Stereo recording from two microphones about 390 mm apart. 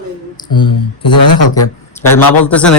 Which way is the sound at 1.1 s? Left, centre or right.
Left.